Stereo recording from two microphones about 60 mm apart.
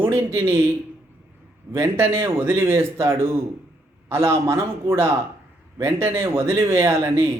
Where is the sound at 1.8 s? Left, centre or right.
Right.